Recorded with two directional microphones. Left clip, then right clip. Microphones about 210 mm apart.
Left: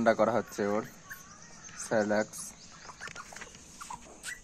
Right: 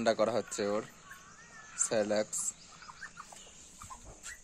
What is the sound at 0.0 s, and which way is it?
Speech, 15° right (ahead or behind).